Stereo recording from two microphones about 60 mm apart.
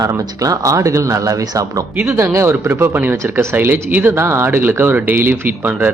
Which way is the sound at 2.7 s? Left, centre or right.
Right.